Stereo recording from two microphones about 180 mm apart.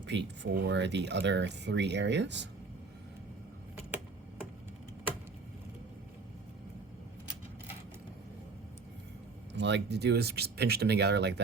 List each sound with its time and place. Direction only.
0.0 s speech: 80° right
9.6 s speech: 75° right (ahead or behind)